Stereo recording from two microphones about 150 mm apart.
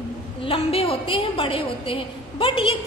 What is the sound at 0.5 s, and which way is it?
A woman's voice, 40° left (ahead or behind).